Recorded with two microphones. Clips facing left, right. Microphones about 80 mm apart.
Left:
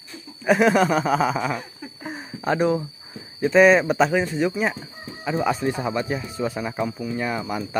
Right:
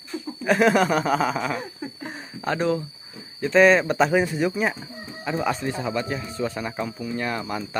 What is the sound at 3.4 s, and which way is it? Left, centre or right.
Speech, centre.